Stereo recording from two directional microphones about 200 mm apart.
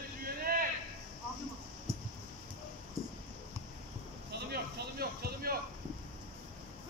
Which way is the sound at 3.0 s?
15° right (ahead or behind).